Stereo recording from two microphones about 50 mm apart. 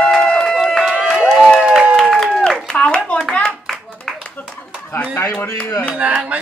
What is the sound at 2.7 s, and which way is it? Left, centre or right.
Clapping, centre.